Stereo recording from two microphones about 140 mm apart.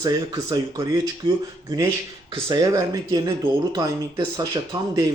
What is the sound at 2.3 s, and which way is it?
Speech, 25° right (ahead or behind).